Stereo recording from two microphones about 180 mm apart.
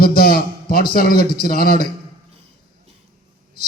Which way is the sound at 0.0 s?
55° left (ahead or behind).